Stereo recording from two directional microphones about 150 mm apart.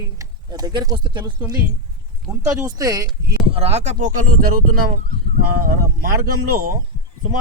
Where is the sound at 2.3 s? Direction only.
20° right (ahead or behind).